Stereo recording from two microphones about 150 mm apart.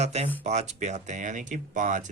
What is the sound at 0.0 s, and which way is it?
Speech, 50° right (ahead or behind).